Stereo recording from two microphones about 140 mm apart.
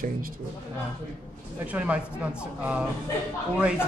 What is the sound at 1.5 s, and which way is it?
Speech, 10° right (ahead or behind).